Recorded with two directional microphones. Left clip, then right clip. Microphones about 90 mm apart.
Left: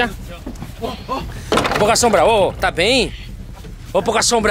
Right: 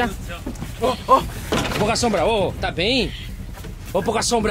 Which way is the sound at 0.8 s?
5° left (ahead or behind).